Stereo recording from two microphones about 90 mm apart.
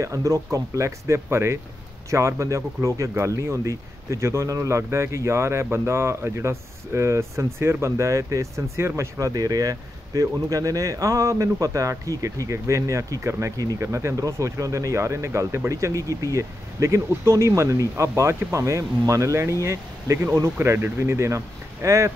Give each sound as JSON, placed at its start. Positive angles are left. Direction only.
{"t": 0.0, "sound": "speech", "side_deg": -35}